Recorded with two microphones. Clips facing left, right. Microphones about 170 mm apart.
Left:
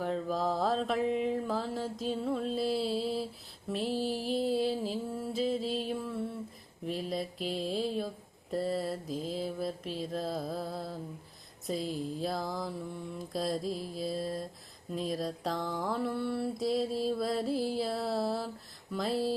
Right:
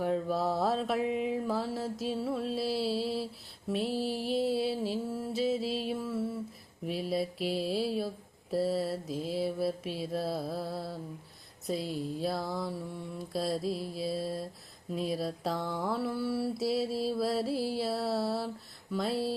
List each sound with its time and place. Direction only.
0.0 s mantra: 5° right (ahead or behind)
3.7 s music: centre (ahead or behind)
6.8 s mantra: 5° right (ahead or behind)